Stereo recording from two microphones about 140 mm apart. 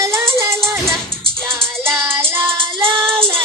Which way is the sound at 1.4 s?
5° left (ahead or behind).